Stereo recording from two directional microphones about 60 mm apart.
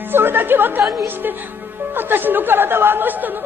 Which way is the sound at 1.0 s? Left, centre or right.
Right.